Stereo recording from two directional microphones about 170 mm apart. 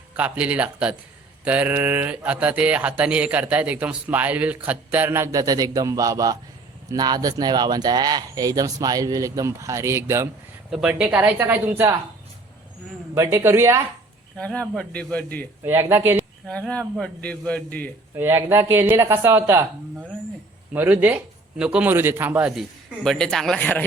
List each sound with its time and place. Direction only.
0.2 s speech: 5° right (ahead or behind)
10.7 s speech: 5° right (ahead or behind)
13.1 s speech: 15° right (ahead or behind)
14.3 s a man's voice: 5° left (ahead or behind)
15.6 s speech: 15° right (ahead or behind)
16.5 s a man's voice: 5° left (ahead or behind)
18.1 s a man's voice: 15° right (ahead or behind); by 23.8 s 10° left (ahead or behind)